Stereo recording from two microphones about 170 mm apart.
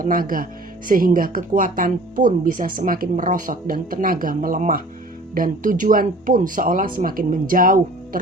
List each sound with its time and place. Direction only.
0.0 s speech: 55° right (ahead or behind)